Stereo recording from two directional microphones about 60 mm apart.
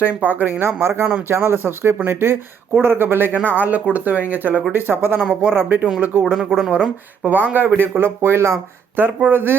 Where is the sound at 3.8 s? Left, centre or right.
Right.